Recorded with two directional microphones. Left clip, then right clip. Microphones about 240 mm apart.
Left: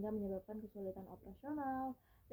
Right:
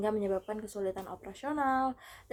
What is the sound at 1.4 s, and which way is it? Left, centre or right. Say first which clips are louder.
Speech: right 12 dB; centre.